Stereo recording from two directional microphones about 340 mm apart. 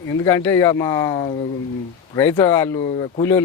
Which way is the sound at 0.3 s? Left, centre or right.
Centre.